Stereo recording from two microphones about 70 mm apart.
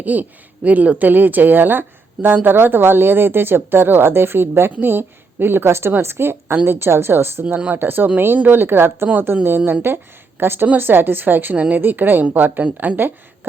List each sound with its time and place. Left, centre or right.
0.0 s a woman's voice: right
7.4 s a woman's voice: right